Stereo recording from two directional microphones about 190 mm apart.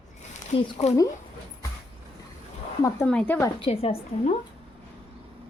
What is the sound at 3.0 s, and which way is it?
Speech, 5° left (ahead or behind).